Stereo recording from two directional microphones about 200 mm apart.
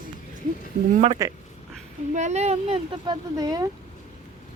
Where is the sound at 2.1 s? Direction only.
35° right (ahead or behind); by 3.6 s 20° right (ahead or behind).